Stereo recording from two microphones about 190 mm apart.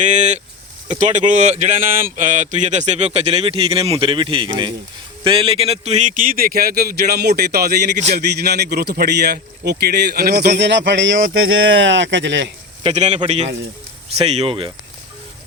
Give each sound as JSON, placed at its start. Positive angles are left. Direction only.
{"t": 0.0, "sound": "a man's voice", "side_deg": -40}
{"t": 12.8, "sound": "speech", "side_deg": -35}